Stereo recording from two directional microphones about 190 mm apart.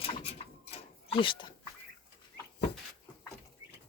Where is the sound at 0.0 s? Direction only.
30° left (ahead or behind).